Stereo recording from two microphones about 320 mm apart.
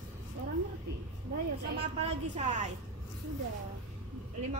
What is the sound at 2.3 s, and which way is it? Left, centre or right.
Speech, right.